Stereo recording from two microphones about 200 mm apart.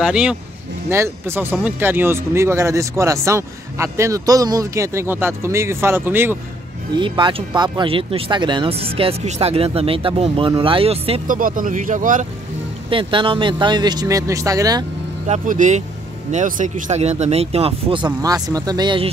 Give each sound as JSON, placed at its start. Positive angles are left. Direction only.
{"t": 0.0, "sound": "speech", "side_deg": -5}
{"t": 7.0, "sound": "speech", "side_deg": -25}
{"t": 11.2, "sound": "speech", "side_deg": -45}
{"t": 12.9, "sound": "speech", "side_deg": -25}
{"t": 15.2, "sound": "speech", "side_deg": -35}